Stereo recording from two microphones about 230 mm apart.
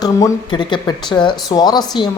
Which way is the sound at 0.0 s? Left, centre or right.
Centre.